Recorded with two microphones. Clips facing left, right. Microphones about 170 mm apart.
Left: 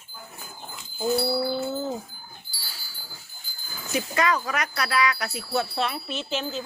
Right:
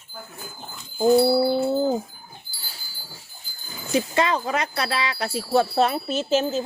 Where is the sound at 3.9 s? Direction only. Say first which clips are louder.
Right 3 dB; 25° right (ahead or behind).